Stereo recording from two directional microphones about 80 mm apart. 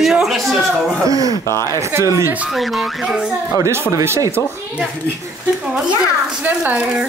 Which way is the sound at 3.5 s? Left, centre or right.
Right.